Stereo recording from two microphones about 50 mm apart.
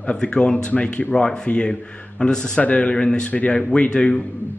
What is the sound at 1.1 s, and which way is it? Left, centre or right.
A man's voice, centre.